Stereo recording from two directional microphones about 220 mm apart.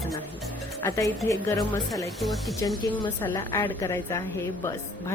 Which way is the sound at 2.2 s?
Centre (ahead or behind).